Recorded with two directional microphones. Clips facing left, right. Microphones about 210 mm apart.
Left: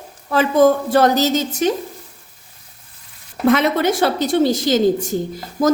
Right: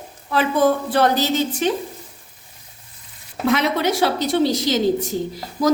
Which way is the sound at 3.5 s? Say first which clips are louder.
Left 4 dB; 50° left (ahead or behind).